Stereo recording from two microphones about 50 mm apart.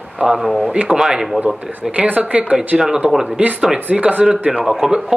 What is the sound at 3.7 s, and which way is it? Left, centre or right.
Speech, right.